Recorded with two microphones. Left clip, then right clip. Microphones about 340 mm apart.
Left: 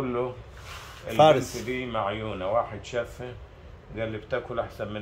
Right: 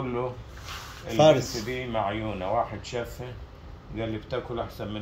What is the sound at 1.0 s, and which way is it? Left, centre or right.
A man's voice, centre.